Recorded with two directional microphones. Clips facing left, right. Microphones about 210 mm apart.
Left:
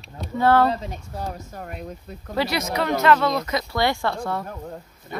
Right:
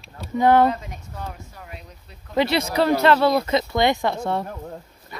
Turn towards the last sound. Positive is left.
turn(degrees=-25)  # may be behind; listen again after turning